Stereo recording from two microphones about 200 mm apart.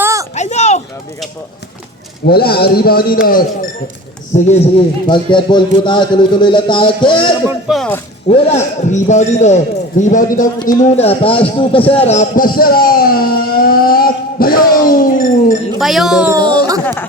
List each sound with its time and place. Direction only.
0.0 s a sound: 15° right (ahead or behind)
0.3 s a sound: 35° left (ahead or behind)
2.2 s a man's voice: 50° left (ahead or behind)
4.4 s a man's voice: 30° left (ahead or behind)
7.7 s speech: 5° left (ahead or behind)
8.3 s a man's voice: 35° left (ahead or behind)
10.4 s a man's voice: 20° left (ahead or behind)
10.9 s a man's voice: 30° left (ahead or behind)
15.8 s speech: centre (ahead or behind)
16.3 s a sound: 20° right (ahead or behind)
16.8 s chatter: 10° left (ahead or behind)